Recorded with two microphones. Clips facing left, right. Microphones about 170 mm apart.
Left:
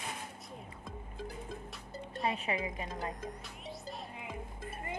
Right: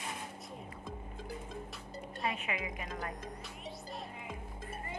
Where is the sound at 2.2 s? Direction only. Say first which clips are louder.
Left 3 dB; 30° left (ahead or behind).